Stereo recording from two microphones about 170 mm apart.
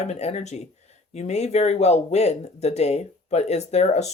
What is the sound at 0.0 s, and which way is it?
Speech, 40° left (ahead or behind).